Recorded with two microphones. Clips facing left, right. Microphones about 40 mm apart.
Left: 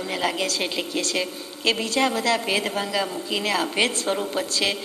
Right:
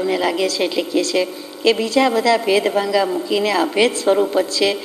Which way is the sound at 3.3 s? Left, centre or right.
Right.